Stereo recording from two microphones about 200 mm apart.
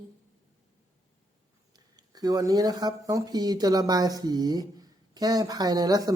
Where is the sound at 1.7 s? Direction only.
20° right (ahead or behind).